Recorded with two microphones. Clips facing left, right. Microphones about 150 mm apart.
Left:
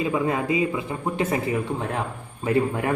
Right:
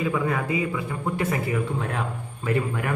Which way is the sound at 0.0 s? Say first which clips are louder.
Left 2 dB; 20° left (ahead or behind).